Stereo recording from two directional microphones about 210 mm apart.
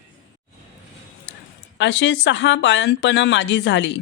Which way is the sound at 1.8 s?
60° left (ahead or behind).